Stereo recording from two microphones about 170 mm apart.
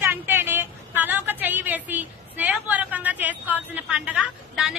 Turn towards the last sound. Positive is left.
turn(degrees=-5)  # may be behind; listen again after turning